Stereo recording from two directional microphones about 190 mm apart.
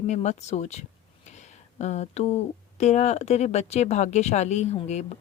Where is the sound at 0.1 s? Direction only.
35° left (ahead or behind).